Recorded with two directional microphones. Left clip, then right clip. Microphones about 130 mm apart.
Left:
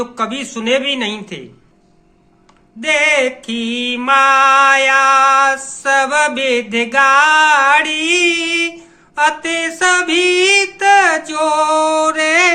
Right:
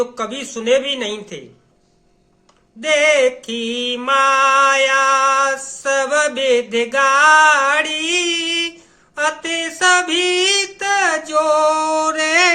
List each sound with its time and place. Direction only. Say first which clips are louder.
0.0 s mantra: left 2 dB; 50° right (ahead or behind)
2.8 s mantra: even; 50° right (ahead or behind)